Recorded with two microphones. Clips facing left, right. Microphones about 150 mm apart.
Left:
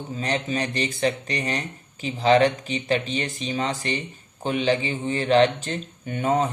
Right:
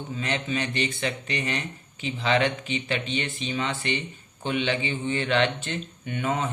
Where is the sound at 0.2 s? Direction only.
35° left (ahead or behind).